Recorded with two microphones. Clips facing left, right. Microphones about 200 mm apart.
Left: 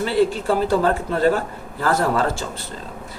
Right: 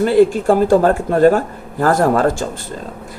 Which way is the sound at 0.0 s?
50° right (ahead or behind).